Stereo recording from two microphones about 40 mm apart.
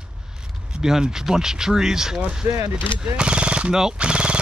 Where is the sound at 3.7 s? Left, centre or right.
Centre.